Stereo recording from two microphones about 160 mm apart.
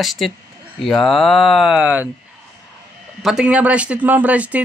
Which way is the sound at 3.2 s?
5° right (ahead or behind).